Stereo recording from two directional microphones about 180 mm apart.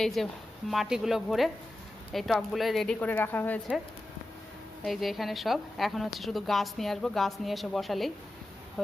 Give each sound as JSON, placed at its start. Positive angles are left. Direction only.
{"t": 0.0, "sound": "a woman's voice", "side_deg": 0}
{"t": 4.8, "sound": "a woman's voice", "side_deg": 0}